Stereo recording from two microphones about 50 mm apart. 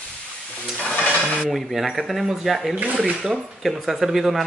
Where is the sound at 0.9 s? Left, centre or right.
Centre.